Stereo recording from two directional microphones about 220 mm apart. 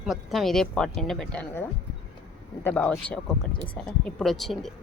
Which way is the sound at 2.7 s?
5° left (ahead or behind).